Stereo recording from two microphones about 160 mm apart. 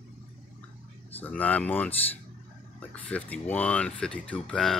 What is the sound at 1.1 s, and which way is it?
Speech, 10° left (ahead or behind).